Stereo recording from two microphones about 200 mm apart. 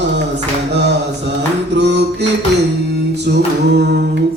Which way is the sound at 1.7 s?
60° right (ahead or behind).